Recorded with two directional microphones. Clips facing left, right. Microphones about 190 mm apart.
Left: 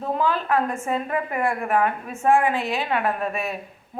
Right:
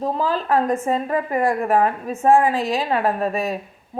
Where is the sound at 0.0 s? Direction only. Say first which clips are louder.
Right 2 dB; 35° right (ahead or behind).